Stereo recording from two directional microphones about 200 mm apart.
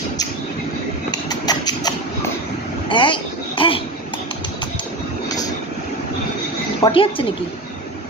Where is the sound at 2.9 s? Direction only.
25° left (ahead or behind).